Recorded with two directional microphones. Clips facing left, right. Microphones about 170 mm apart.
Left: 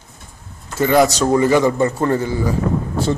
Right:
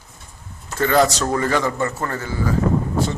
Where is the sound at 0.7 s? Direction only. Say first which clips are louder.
Left 3 dB; 10° left (ahead or behind).